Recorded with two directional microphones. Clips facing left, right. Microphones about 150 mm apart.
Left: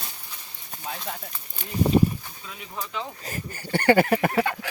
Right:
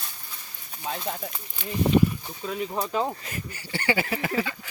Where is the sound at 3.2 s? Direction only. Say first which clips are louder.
Left 2 dB; 40° left (ahead or behind); by 4.7 s 60° left (ahead or behind).